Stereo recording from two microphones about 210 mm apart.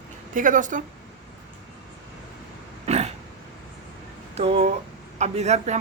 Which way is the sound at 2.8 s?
30° right (ahead or behind).